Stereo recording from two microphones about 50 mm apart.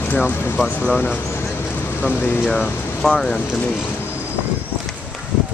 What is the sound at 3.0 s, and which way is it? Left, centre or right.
Speech, centre.